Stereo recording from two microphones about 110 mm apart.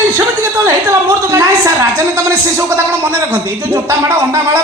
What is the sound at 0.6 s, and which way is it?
A woman's voice, 25° right (ahead or behind).